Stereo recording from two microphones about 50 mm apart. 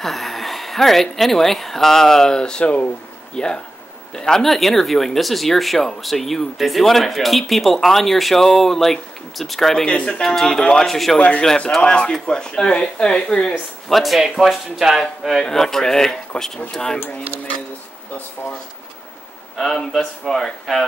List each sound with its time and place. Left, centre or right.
0.0 s a sound: centre
1.1 s speech: centre
2.6 s speech: left
3.3 s speech: centre
9.8 s speech: centre
10.3 s speech: centre
11.1 s speech: left
11.4 s speech: centre
19.5 s speech: centre